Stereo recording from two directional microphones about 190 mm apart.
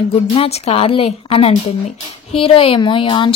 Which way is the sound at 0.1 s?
30° left (ahead or behind).